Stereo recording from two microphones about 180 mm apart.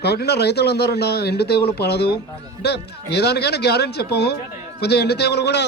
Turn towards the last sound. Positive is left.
turn(degrees=70)  # may be behind; listen again after turning